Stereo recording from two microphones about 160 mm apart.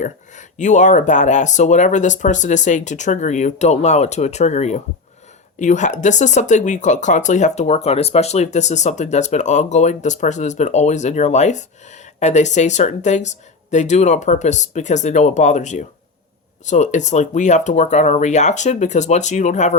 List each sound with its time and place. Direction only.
0.0 s speech: 50° left (ahead or behind)